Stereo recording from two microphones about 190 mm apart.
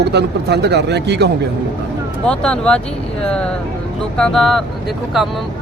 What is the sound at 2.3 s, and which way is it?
Speech, 5° left (ahead or behind).